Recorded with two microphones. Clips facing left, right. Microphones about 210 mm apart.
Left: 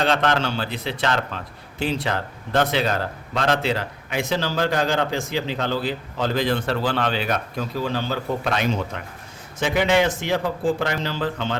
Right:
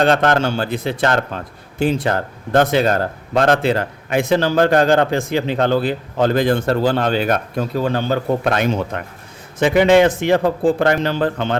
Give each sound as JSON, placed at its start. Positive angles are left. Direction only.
{"t": 0.0, "sound": "speech", "side_deg": -45}